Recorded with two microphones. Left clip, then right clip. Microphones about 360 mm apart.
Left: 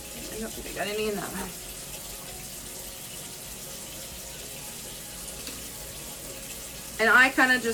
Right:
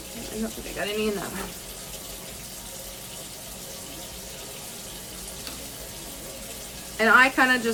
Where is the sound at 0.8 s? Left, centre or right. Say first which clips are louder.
Right 2 dB; centre.